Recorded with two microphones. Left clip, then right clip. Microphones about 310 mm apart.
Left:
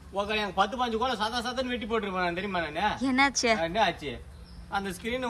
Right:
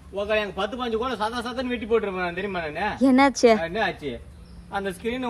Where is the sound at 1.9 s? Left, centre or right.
Left.